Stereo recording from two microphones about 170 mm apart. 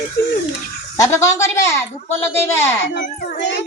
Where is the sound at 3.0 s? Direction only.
60° left (ahead or behind).